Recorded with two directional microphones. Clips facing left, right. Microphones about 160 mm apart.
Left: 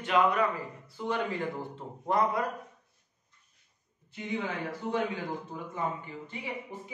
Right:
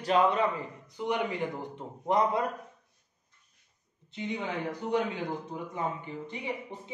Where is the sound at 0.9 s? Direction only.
15° right (ahead or behind).